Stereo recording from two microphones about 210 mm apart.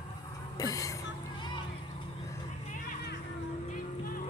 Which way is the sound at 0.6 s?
15° left (ahead or behind).